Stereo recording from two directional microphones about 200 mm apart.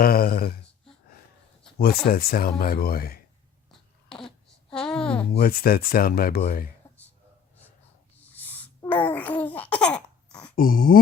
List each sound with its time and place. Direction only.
0.0 s speech: 50° left (ahead or behind)
1.8 s speech: 50° left (ahead or behind)
4.1 s a sound: centre (ahead or behind)
5.3 s speech: 50° left (ahead or behind)
8.4 s babbling: 10° left (ahead or behind)
10.5 s a sound: 45° left (ahead or behind)